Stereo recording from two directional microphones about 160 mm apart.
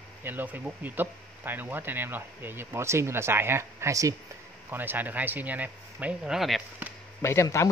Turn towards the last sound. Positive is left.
turn(degrees=15)  # may be behind; listen again after turning